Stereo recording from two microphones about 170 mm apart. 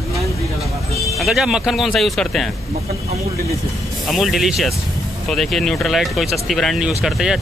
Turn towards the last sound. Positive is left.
turn(degrees=-5)  # may be behind; listen again after turning